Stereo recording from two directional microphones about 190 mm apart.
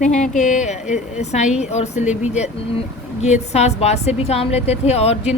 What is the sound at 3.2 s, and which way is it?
A woman's voice, 35° left (ahead or behind).